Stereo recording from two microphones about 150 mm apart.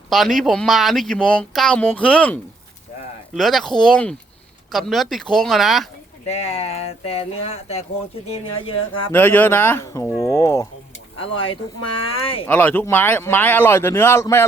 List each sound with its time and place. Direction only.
0.1 s speech: centre (ahead or behind)
6.2 s speech: 45° left (ahead or behind)
9.1 s speech: 15° left (ahead or behind)
11.2 s speech: 35° left (ahead or behind)
12.5 s speech: 10° left (ahead or behind)